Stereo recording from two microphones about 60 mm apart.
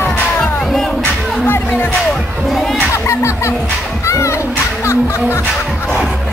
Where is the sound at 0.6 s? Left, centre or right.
Centre.